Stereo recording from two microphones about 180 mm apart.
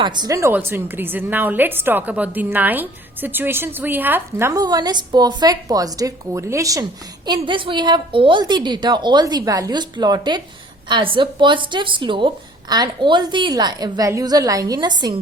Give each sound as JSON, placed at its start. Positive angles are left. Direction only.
{"t": 0.0, "sound": "a woman's voice", "side_deg": -25}